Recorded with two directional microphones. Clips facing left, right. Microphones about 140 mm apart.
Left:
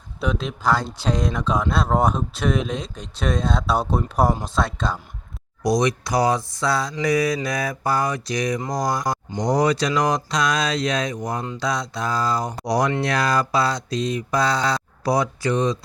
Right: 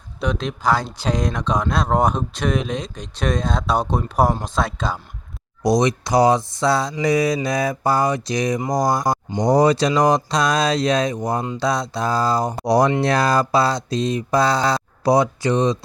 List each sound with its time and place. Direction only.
0.2 s speech: 5° left (ahead or behind)
5.6 s speech: 25° right (ahead or behind)
11.5 s mantra: 30° right (ahead or behind)
12.6 s speech: 30° right (ahead or behind)